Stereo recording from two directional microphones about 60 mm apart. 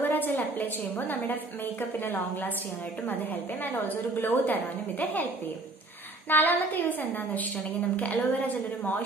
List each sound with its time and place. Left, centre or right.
0.0 s a woman's voice: left